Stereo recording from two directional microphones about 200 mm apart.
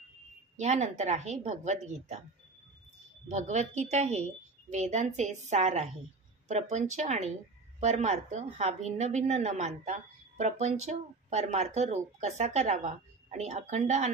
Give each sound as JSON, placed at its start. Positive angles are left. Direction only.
{"t": 0.6, "sound": "a woman's voice", "side_deg": -35}
{"t": 3.3, "sound": "a woman's voice", "side_deg": -35}